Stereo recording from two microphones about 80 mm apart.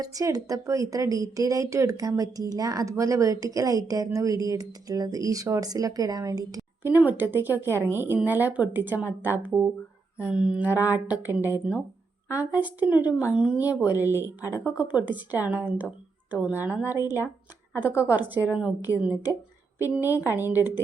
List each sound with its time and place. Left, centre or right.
0.0 s a woman's voice: right
6.8 s speech: right
10.2 s mantra: centre
10.7 s speech: right